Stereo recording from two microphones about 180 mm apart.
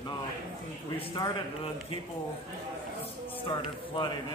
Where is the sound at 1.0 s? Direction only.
30° left (ahead or behind).